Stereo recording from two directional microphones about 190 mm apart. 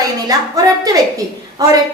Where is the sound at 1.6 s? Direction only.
20° right (ahead or behind).